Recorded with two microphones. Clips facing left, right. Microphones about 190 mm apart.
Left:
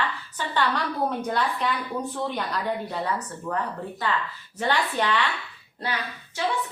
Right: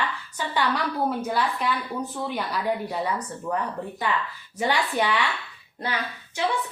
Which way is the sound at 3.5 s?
15° right (ahead or behind).